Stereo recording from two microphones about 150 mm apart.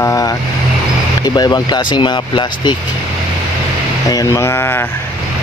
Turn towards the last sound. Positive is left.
turn(degrees=15)  # may be behind; listen again after turning